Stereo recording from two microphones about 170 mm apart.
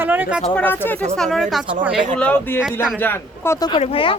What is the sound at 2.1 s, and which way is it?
Speech, 10° left (ahead or behind).